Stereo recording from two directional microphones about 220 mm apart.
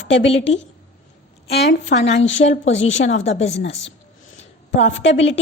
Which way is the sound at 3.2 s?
30° left (ahead or behind).